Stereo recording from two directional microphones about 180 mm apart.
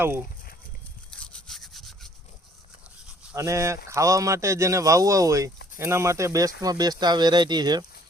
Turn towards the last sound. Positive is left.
turn(degrees=-25)  # may be behind; listen again after turning